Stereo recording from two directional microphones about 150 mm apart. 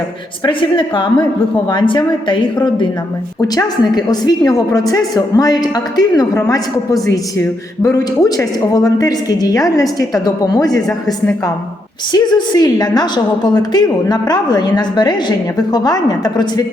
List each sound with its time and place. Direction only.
0.4 s a woman's voice: 35° left (ahead or behind)
7.8 s a woman's voice: 25° left (ahead or behind)